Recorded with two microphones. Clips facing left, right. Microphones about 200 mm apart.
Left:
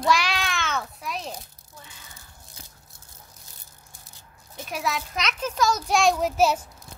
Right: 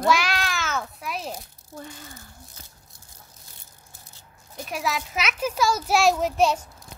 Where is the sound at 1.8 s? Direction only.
45° right (ahead or behind).